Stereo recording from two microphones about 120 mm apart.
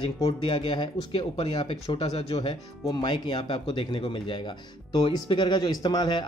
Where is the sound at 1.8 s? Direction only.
55° left (ahead or behind).